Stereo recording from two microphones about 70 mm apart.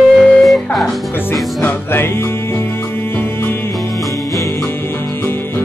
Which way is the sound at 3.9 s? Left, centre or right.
Centre.